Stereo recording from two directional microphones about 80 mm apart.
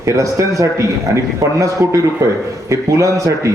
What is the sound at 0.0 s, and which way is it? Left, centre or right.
A man's voice, right.